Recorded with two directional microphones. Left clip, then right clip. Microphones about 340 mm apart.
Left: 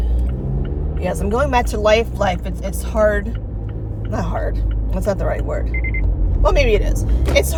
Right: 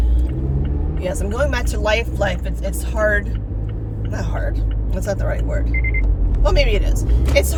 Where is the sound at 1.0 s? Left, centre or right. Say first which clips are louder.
Left 2 dB; centre.